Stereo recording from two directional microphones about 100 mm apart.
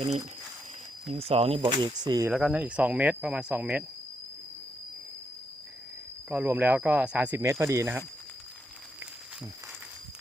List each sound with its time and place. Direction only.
1.1 s speech: 80° right; by 2.2 s 45° right (ahead or behind)
2.3 s speech: 10° right (ahead or behind)
6.3 s speech: 20° right (ahead or behind)
7.6 s speech: 30° right (ahead or behind)